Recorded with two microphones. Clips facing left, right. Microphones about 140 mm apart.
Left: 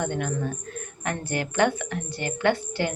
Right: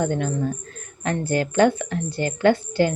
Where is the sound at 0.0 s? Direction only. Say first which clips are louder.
Right 4 dB; 35° right (ahead or behind).